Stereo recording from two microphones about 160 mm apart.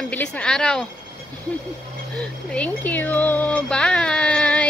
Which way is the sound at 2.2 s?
5° left (ahead or behind).